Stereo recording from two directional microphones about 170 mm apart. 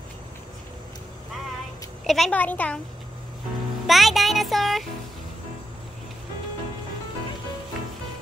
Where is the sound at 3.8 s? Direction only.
Centre (ahead or behind).